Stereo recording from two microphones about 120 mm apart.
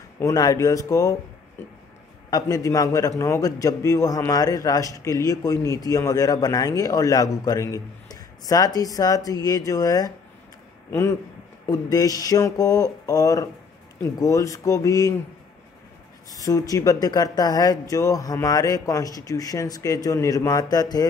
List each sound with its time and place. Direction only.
0.2 s a man's voice: 30° left (ahead or behind)
16.3 s a man's voice: 30° left (ahead or behind)